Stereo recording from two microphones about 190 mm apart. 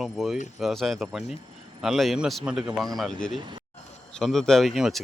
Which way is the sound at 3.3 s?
25° right (ahead or behind).